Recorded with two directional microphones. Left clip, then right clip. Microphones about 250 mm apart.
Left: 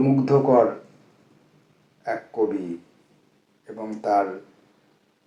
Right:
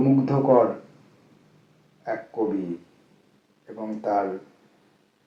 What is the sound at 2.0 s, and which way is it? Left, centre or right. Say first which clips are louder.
Speech: left 2 dB; left.